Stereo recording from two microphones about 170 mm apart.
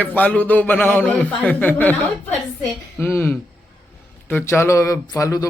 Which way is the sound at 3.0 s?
10° left (ahead or behind).